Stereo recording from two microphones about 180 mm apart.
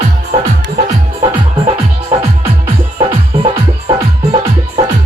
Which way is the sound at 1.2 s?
35° right (ahead or behind).